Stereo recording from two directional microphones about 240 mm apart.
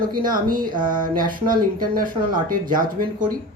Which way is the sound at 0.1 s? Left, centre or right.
Right.